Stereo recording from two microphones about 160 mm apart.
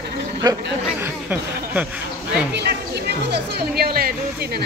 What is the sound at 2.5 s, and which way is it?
Music, 85° right.